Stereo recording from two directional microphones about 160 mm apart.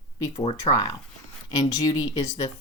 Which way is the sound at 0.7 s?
40° left (ahead or behind).